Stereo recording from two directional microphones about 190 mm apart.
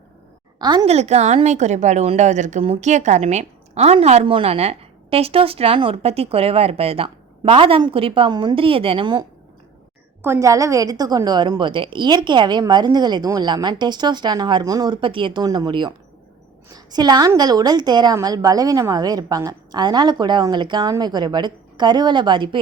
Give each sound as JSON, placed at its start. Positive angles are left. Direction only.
{"t": 0.6, "sound": "a woman's voice", "side_deg": -20}
{"t": 0.9, "sound": "a woman's voice", "side_deg": -35}
{"t": 10.2, "sound": "a woman's voice", "side_deg": -15}